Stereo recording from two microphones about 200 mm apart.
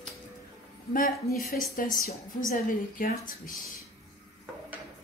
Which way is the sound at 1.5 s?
45° left (ahead or behind).